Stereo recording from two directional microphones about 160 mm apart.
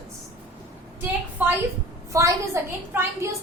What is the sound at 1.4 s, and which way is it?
A woman's voice, 10° right (ahead or behind).